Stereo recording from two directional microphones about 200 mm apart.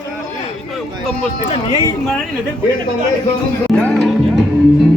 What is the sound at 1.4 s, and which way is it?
Speech, 25° left (ahead or behind).